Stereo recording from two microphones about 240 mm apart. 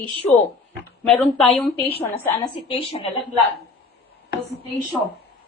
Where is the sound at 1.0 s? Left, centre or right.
Centre.